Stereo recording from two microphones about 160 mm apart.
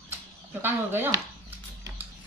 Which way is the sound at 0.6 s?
15° right (ahead or behind).